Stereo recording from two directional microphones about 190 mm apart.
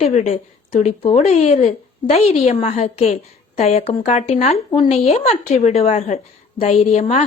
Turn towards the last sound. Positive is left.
turn(degrees=35)  # may be behind; listen again after turning